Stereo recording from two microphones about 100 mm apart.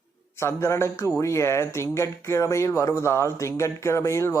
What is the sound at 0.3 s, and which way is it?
Speech, 30° left (ahead or behind).